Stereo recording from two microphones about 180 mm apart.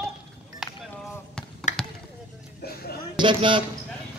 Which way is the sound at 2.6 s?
60° left (ahead or behind).